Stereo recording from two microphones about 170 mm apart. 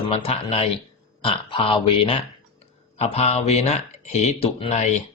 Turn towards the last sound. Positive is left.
turn(degrees=40)  # may be behind; listen again after turning